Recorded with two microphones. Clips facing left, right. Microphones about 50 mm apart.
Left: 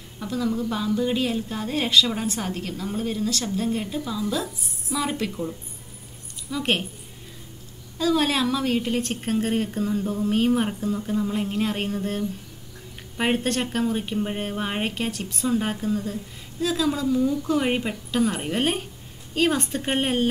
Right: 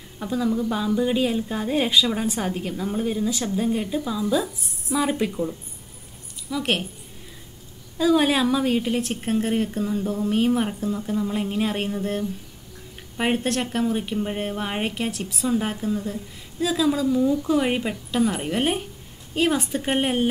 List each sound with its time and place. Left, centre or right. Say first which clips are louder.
0.2 s speech: right 2 dB; centre
0.5 s a woman's voice: right 2 dB; centre
6.5 s speech: even; centre
8.0 s a woman's voice: right 3 dB; centre
13.5 s speech: right 1 dB; centre
15.9 s speech: even; centre